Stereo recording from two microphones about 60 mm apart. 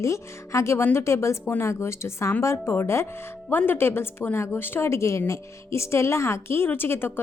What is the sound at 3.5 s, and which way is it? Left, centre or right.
A woman's voice, left.